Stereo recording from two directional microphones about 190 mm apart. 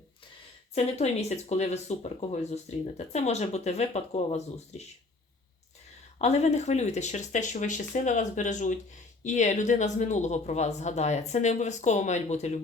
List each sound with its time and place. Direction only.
0.7 s speech: 35° left (ahead or behind)
6.1 s speech: 35° left (ahead or behind)